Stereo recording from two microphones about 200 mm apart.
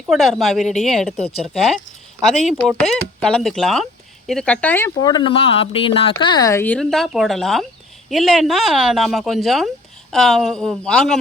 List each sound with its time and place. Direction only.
0.0 s speech: centre (ahead or behind)
2.2 s speech: centre (ahead or behind)